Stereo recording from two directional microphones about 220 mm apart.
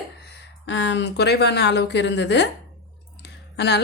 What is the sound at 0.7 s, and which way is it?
A woman's voice, 55° left (ahead or behind).